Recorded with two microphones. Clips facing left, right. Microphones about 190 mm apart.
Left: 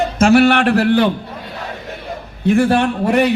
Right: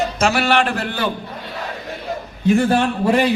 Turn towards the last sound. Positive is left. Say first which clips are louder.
# left 2 dB
turn(degrees=65)  # may be behind; listen again after turning